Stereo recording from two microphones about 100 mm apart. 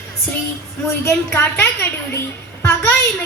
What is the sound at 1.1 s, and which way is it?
A woman's voice, 20° left (ahead or behind).